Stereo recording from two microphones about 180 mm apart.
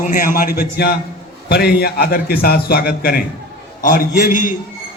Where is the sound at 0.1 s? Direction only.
50° left (ahead or behind).